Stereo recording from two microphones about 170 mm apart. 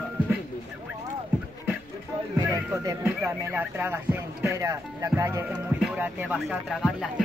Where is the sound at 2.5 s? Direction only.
15° right (ahead or behind).